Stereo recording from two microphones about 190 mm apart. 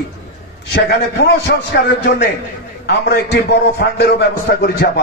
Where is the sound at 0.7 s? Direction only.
60° left (ahead or behind).